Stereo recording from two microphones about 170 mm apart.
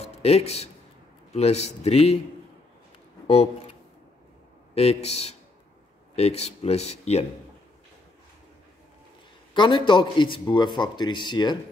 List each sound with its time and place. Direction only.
0.0 s speech: 40° left (ahead or behind)
4.7 s speech: 35° left (ahead or behind)
9.5 s a man's voice: 25° left (ahead or behind)